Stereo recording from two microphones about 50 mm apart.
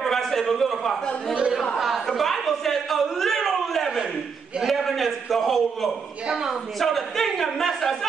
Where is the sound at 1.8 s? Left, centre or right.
Centre.